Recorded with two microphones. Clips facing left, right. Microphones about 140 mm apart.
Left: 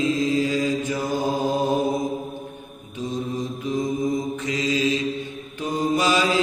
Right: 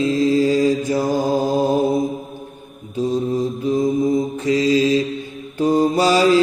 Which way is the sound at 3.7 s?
30° right (ahead or behind).